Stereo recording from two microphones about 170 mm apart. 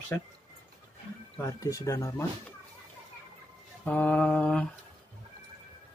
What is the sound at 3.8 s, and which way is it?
Speech, 10° left (ahead or behind).